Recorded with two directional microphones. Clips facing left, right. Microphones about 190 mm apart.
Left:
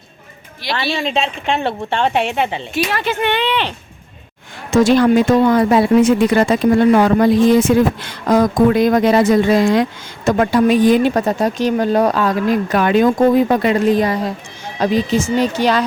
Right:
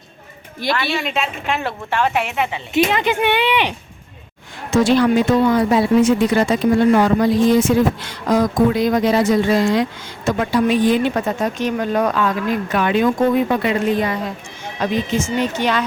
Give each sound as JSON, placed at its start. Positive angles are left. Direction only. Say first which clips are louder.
{"t": 0.8, "sound": "a woman's voice", "louder": "left 3 dB", "side_deg": 30}
{"t": 2.7, "sound": "speech", "louder": "right 4 dB", "side_deg": -20}
{"t": 4.7, "sound": "speech", "louder": "left 3 dB", "side_deg": 45}